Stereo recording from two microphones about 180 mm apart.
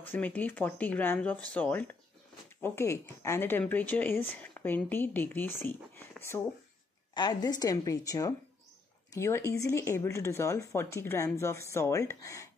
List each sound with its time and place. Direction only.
0.1 s a woman's voice: 10° left (ahead or behind)